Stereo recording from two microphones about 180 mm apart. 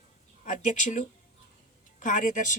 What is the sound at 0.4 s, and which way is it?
Speech, 45° left (ahead or behind).